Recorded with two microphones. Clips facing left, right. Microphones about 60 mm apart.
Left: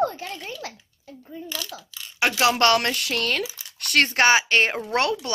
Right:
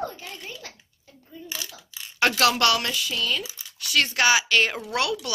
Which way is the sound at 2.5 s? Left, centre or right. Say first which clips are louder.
Left 3 dB; left.